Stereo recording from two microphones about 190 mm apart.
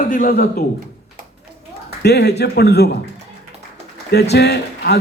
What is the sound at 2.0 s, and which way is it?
Speech, 60° left (ahead or behind).